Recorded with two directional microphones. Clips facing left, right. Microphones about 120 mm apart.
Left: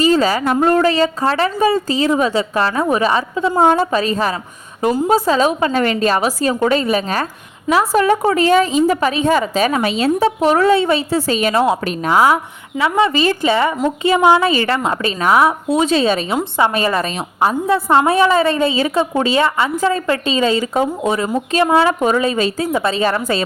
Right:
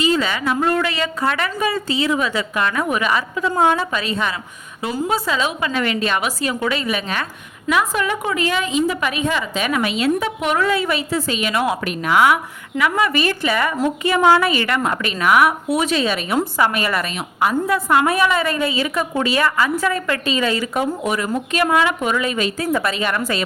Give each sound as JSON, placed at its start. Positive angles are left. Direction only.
{"t": 0.0, "sound": "a woman's voice", "side_deg": 40}